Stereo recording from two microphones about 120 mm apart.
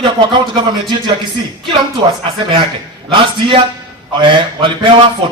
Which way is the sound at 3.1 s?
40° right (ahead or behind).